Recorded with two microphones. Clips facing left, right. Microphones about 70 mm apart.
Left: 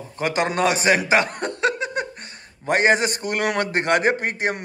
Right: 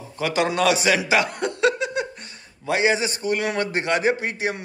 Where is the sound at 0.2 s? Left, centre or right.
Left.